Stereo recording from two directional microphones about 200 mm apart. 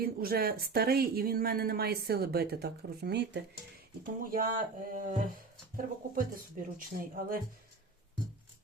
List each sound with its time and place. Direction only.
0.0 s speech: 50° right (ahead or behind)
4.0 s speech: 45° right (ahead or behind)